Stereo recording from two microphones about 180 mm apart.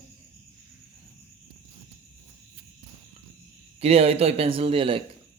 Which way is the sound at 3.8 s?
35° right (ahead or behind).